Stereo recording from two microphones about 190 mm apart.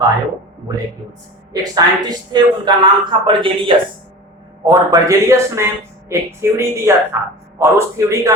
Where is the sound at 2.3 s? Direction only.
20° right (ahead or behind).